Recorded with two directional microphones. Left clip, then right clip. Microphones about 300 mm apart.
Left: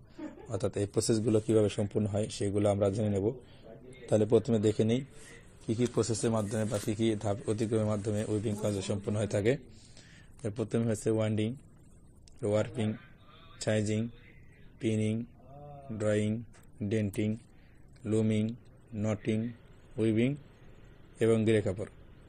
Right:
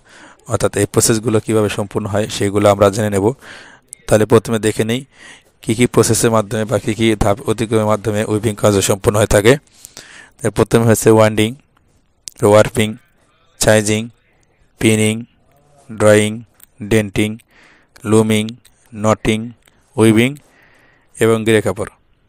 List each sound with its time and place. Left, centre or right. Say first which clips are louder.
0.5 s speech: right 18 dB; right